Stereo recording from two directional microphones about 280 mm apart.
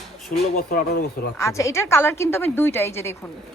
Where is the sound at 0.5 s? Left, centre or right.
Left.